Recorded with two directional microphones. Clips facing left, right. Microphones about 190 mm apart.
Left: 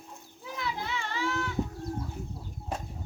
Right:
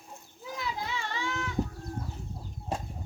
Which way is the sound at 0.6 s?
20° right (ahead or behind).